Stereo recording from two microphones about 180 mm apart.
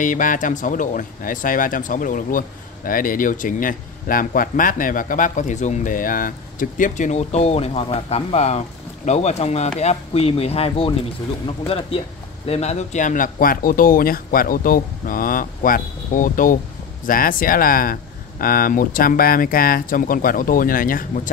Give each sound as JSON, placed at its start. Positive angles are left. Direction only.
{"t": 0.0, "sound": "speech", "side_deg": 45}